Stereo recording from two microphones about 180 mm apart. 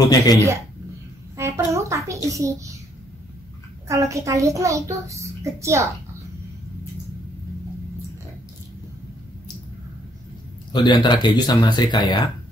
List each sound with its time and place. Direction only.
0.1 s speech: 20° left (ahead or behind)
1.3 s a sound: 15° right (ahead or behind)
2.2 s a child's voice: 15° right (ahead or behind)
3.9 s a child's voice: 15° right (ahead or behind)
10.7 s speech: 25° left (ahead or behind)